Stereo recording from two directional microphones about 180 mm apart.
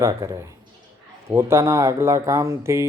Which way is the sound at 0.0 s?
15° right (ahead or behind).